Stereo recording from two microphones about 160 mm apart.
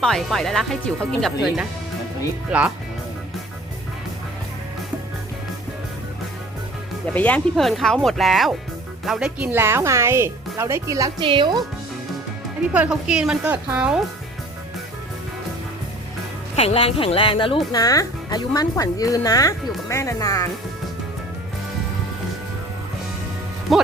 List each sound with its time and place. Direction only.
0.0 s speech: centre (ahead or behind)
7.1 s speech: 10° left (ahead or behind); by 11.1 s 20° right (ahead or behind)
11.2 s speech: 30° right (ahead or behind)
12.7 s speech: 5° right (ahead or behind)
16.6 s speech: 40° left (ahead or behind)
17.7 s speech: 20° left (ahead or behind)
23.7 s speech: centre (ahead or behind)